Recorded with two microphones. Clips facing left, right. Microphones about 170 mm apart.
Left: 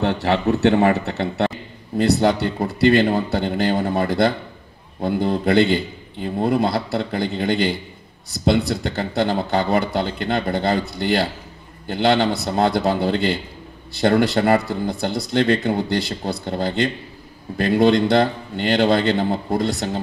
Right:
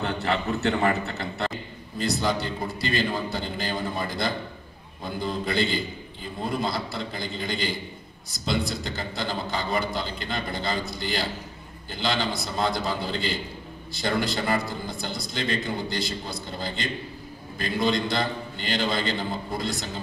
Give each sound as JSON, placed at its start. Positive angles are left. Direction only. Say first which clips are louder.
{"t": 0.0, "sound": "a man's voice", "louder": "left 8 dB", "side_deg": 70}